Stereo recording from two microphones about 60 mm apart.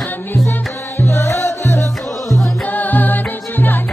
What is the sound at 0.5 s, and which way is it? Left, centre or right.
Music, left.